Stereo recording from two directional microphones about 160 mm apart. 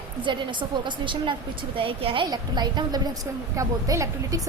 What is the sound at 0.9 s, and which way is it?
A woman's voice, 30° right (ahead or behind).